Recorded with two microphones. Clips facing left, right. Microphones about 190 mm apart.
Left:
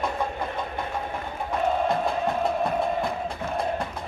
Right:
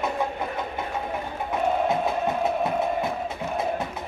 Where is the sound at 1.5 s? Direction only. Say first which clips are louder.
Even; centre (ahead or behind).